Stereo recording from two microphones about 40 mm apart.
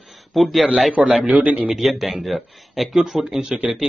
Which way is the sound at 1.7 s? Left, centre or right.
Centre.